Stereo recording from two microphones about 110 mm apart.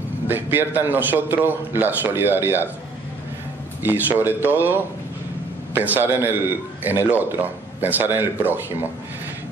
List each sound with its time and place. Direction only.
0.3 s a man's voice: 20° right (ahead or behind)
3.8 s a man's voice: 20° right (ahead or behind)